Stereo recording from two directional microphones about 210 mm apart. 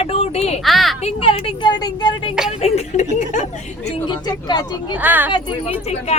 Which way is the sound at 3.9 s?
20° left (ahead or behind).